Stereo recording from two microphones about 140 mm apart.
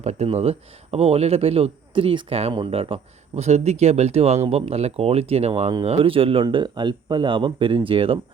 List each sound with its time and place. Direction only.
0.0 s speech: 55° right (ahead or behind)